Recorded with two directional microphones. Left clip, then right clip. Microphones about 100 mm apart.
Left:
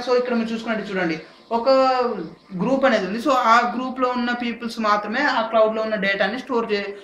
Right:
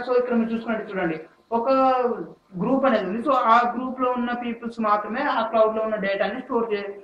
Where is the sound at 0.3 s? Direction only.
20° left (ahead or behind).